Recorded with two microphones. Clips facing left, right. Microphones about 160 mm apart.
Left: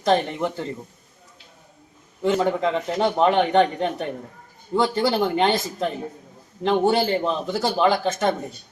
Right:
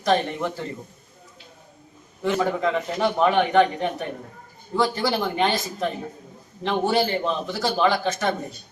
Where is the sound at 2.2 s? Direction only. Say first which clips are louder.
Left 2 dB; 25° left (ahead or behind).